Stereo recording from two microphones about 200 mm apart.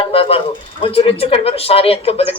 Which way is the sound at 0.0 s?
30° left (ahead or behind).